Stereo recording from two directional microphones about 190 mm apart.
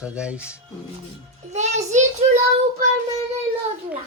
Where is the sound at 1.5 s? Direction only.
35° right (ahead or behind).